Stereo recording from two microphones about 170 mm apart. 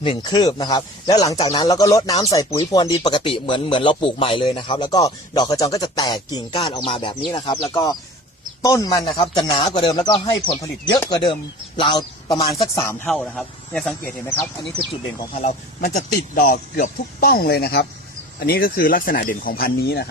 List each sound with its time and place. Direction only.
0.0 s a man's voice: 30° left (ahead or behind)
12.7 s speech: 15° left (ahead or behind)
13.1 s speech: centre (ahead or behind)
15.9 s speech: 50° left (ahead or behind); by 20.1 s 70° left (ahead or behind)